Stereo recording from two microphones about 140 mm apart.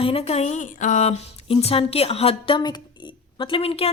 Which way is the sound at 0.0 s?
45° left (ahead or behind).